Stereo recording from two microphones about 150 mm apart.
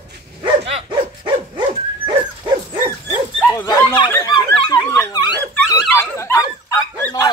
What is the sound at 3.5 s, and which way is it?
Dog, 20° left (ahead or behind).